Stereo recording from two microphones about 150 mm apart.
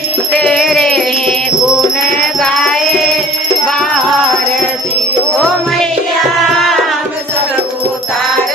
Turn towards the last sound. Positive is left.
turn(degrees=0)  # may be behind; listen again after turning